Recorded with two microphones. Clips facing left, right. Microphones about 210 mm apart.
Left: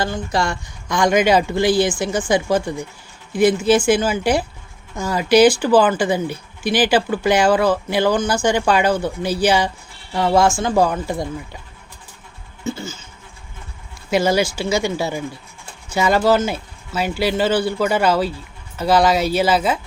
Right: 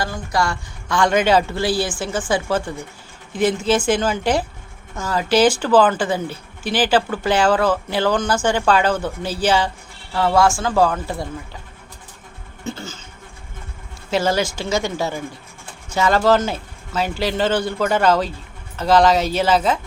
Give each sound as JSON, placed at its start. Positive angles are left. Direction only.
{"t": 0.0, "sound": "speech", "side_deg": 25}
{"t": 12.6, "sound": "a sound", "side_deg": 10}
{"t": 14.1, "sound": "speech", "side_deg": 10}